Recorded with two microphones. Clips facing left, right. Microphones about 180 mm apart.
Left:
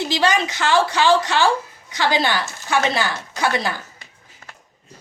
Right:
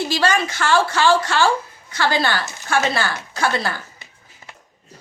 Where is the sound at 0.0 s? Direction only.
20° left (ahead or behind).